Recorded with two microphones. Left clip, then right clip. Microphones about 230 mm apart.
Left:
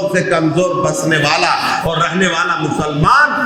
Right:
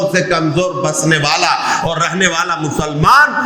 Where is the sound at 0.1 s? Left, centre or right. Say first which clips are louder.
Even; right.